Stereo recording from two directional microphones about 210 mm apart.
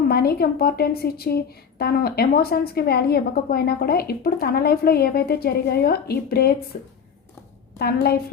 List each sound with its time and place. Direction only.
0.0 s a woman's voice: 50° left (ahead or behind)